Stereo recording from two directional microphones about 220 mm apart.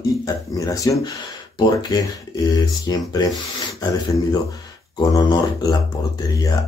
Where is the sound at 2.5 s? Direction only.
15° left (ahead or behind).